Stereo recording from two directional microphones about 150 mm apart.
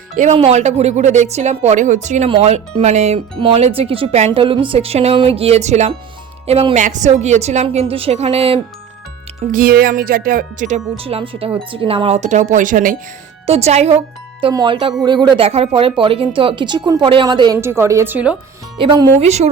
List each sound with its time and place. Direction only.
0.2 s a woman's voice: 45° right (ahead or behind)
6.8 s a woman's voice: 55° right (ahead or behind)
9.5 s speech: 75° right (ahead or behind)
10.9 s speech: 40° right (ahead or behind); by 13.0 s 65° right (ahead or behind)
13.5 s a woman's voice: 45° right (ahead or behind)
14.5 s speech: 30° right (ahead or behind)
17.6 s a woman's voice: 15° right (ahead or behind)
18.8 s speech: 30° right (ahead or behind)
19.2 s a woman's voice: 45° right (ahead or behind)